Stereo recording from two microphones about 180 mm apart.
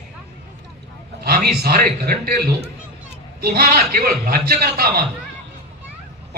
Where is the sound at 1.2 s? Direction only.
60° right (ahead or behind).